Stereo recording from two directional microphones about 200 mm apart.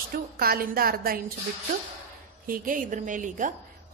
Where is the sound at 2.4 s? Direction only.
45° right (ahead or behind).